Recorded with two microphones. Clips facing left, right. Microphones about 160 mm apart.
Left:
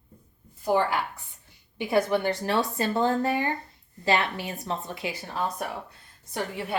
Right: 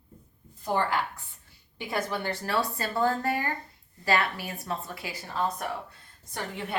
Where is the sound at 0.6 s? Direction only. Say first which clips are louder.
Left 3 dB; 10° left (ahead or behind).